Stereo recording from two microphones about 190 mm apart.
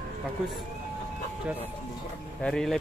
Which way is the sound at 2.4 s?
Centre (ahead or behind).